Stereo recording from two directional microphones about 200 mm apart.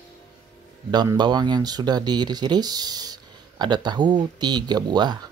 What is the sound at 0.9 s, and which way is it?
Speech, 20° right (ahead or behind).